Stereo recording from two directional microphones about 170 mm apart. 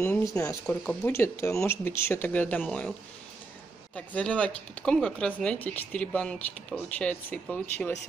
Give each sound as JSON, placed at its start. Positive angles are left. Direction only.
{"t": 0.0, "sound": "speech", "side_deg": 15}
{"t": 0.7, "sound": "speech", "side_deg": 5}
{"t": 3.9, "sound": "speech", "side_deg": 5}